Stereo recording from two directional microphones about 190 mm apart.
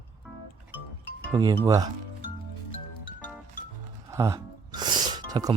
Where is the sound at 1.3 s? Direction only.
20° right (ahead or behind).